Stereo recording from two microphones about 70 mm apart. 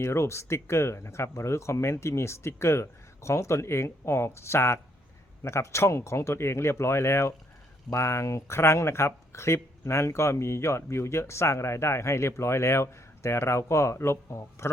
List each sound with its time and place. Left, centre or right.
0.0 s speech: left